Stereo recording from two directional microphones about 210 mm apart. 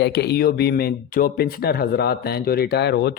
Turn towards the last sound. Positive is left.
turn(degrees=50)  # may be behind; listen again after turning